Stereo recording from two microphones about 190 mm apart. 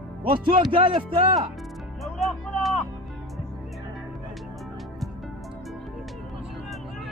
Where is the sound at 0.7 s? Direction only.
25° right (ahead or behind).